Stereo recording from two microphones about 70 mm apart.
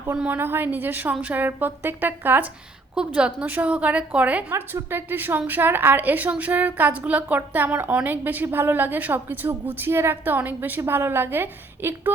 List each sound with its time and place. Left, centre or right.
0.3 s a woman's voice: right
2.9 s a woman's voice: centre
4.5 s a woman's voice: right